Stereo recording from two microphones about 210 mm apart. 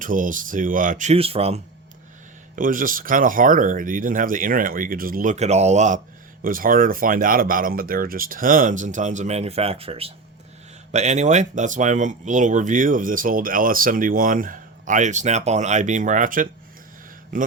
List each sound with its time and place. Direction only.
0.0 s speech: 40° right (ahead or behind)
2.6 s speech: 40° right (ahead or behind)